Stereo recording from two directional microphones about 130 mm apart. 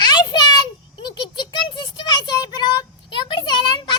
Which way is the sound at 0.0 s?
35° left (ahead or behind).